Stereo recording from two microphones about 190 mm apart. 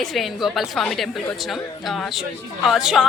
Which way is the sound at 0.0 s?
Centre (ahead or behind).